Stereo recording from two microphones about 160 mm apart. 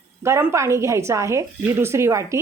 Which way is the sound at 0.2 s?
15° right (ahead or behind).